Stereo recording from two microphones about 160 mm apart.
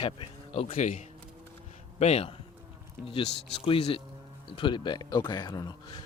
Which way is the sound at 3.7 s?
35° left (ahead or behind).